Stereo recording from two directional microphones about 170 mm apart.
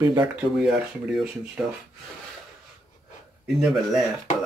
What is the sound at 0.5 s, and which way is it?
Speech, centre (ahead or behind).